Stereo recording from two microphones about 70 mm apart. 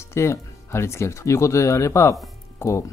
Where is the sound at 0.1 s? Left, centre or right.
Left.